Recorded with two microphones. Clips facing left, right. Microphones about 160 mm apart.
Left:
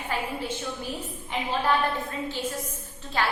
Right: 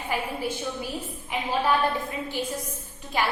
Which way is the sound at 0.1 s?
10° right (ahead or behind).